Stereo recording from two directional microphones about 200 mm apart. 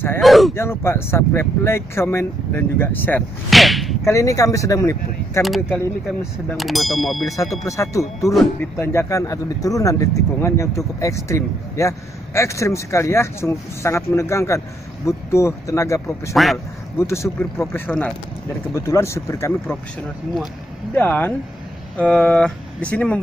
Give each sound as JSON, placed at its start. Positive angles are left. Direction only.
{"t": 0.2, "sound": "a sound", "side_deg": 0}
{"t": 0.6, "sound": "speech", "side_deg": 10}
{"t": 4.0, "sound": "speech", "side_deg": 15}
{"t": 5.7, "sound": "speech", "side_deg": 0}
{"t": 7.6, "sound": "speech", "side_deg": 15}
{"t": 16.4, "sound": "speech", "side_deg": 0}
{"t": 17.0, "sound": "speech", "side_deg": 15}
{"t": 20.9, "sound": "speech", "side_deg": 10}